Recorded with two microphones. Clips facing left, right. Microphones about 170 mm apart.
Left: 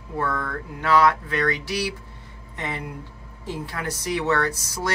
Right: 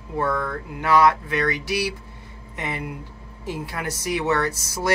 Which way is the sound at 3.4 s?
10° right (ahead or behind).